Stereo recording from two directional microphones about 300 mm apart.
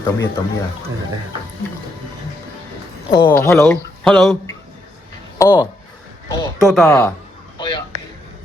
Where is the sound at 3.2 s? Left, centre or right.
Centre.